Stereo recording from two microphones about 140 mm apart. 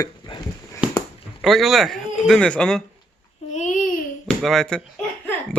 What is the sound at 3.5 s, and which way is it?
Babbling, 60° left (ahead or behind).